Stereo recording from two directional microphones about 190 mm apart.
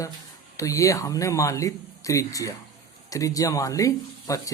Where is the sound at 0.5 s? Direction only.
15° left (ahead or behind).